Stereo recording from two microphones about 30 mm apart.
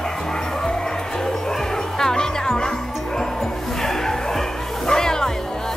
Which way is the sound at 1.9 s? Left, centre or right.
Centre.